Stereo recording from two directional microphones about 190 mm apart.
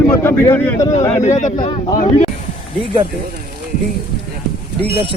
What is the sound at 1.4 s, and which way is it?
Speech, 40° left (ahead or behind).